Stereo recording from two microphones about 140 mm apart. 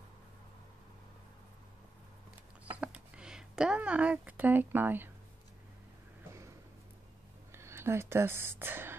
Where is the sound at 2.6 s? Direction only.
10° right (ahead or behind).